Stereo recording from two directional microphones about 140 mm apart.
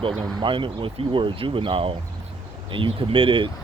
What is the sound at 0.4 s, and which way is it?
Speech, 40° right (ahead or behind).